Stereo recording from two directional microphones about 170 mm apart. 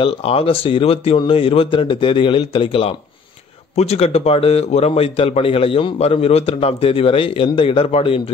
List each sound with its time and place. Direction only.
0.0 s a man's voice: 35° left (ahead or behind)